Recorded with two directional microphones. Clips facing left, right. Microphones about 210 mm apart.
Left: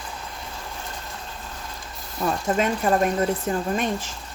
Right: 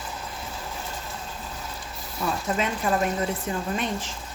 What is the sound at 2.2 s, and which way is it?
A woman's voice, 45° left (ahead or behind).